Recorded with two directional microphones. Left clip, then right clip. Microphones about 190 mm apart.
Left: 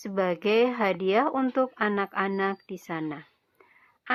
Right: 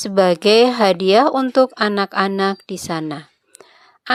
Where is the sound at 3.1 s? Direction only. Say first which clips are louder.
Right 10 dB; 40° right (ahead or behind).